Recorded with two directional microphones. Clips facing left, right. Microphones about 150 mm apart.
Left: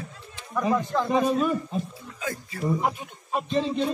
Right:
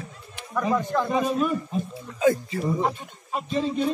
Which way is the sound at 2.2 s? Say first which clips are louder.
Right 13 dB; 25° right (ahead or behind).